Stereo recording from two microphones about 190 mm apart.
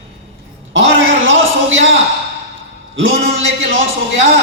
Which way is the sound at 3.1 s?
35° right (ahead or behind).